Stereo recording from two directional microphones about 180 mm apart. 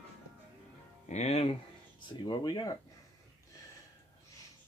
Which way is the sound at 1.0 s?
40° left (ahead or behind).